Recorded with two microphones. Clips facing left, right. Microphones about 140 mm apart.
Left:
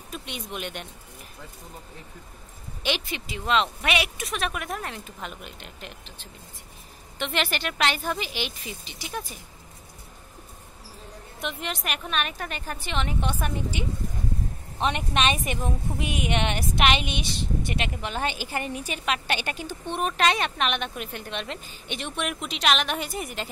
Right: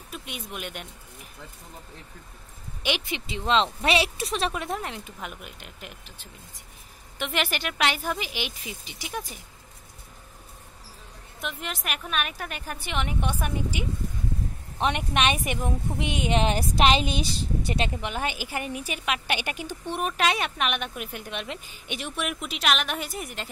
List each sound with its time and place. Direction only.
0.1 s speech: 5° right (ahead or behind)
2.8 s a woman's voice: 15° right (ahead or behind)
3.3 s a woman's voice: 25° right (ahead or behind)
11.4 s a woman's voice: centre (ahead or behind); by 18.0 s 35° right (ahead or behind)
18.0 s a woman's voice: 10° right (ahead or behind)